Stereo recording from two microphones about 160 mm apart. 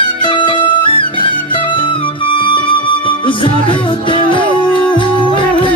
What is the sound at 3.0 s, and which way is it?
Music, 30° left (ahead or behind).